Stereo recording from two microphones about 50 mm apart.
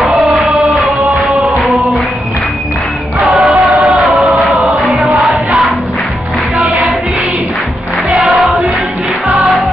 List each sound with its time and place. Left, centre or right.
0.4 s music: centre
3.3 s music: centre
8.2 s music: centre